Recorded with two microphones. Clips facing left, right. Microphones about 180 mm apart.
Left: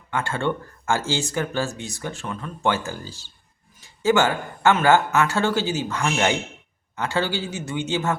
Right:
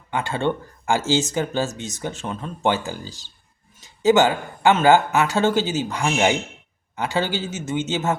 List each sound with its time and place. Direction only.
0.1 s speech: 15° right (ahead or behind)